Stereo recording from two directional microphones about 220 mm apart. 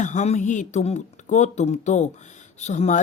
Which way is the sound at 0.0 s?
30° left (ahead or behind).